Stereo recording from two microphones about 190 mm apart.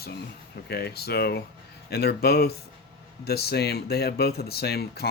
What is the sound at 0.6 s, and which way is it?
Speech, 55° left (ahead or behind).